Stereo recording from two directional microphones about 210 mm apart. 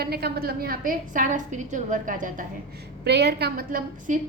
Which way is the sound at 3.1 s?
50° right (ahead or behind).